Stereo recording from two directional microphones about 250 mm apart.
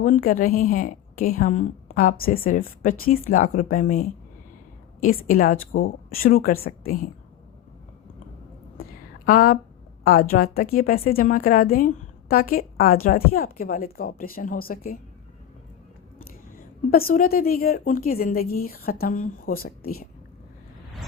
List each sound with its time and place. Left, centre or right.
0.0 s a woman's voice: left
8.8 s a sound: left
10.1 s a woman's voice: left
16.1 s a woman's voice: left